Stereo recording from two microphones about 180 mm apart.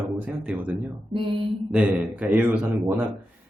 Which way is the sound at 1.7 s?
5° right (ahead or behind).